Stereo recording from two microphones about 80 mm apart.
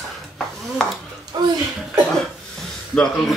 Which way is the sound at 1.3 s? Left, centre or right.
Right.